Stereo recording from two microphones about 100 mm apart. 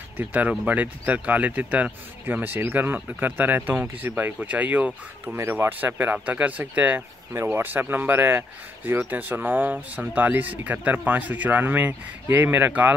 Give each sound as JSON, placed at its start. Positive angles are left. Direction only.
{"t": 0.2, "sound": "speech", "side_deg": -15}